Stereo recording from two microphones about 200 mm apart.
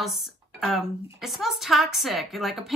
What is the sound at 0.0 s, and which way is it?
A woman's voice, centre (ahead or behind).